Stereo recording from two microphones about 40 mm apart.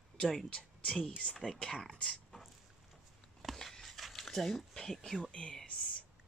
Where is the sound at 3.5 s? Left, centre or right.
Centre.